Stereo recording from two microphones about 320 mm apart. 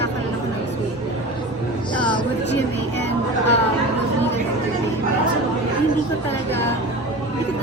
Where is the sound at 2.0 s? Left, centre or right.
Centre.